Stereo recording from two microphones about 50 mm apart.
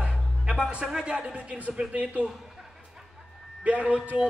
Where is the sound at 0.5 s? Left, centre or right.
Centre.